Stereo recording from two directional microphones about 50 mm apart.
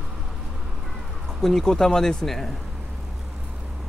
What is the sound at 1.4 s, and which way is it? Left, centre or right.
Speech, centre.